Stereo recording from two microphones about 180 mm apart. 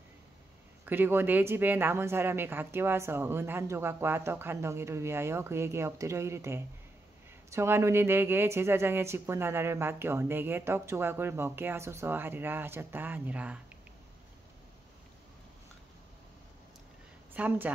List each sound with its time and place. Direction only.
0.8 s a woman's voice: 10° right (ahead or behind)
17.3 s a woman's voice: 10° right (ahead or behind)